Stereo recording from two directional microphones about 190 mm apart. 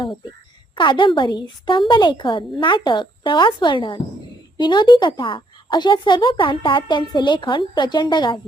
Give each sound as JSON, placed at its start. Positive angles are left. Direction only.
{"t": 0.8, "sound": "a woman's voice", "side_deg": 25}